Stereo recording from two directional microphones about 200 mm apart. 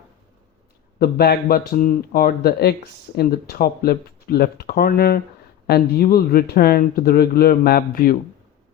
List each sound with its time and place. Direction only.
0.9 s speech: 50° left (ahead or behind)